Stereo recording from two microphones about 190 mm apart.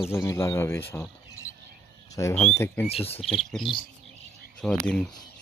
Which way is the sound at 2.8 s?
30° left (ahead or behind).